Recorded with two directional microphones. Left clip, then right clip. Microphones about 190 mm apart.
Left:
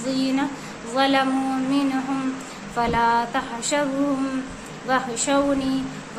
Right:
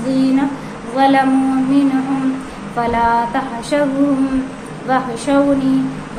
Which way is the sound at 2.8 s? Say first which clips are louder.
Right 5 dB; 15° left (ahead or behind).